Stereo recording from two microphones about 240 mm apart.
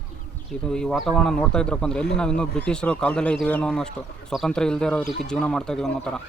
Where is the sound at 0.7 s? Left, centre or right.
Centre.